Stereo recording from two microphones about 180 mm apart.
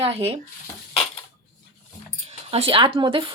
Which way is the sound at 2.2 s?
35° right (ahead or behind).